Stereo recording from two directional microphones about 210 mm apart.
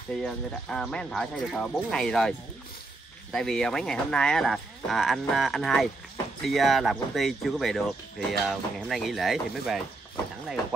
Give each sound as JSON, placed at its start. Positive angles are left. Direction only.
{"t": 0.2, "sound": "speech", "side_deg": 0}